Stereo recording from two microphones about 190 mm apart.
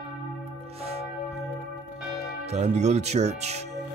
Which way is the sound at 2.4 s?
35° right (ahead or behind).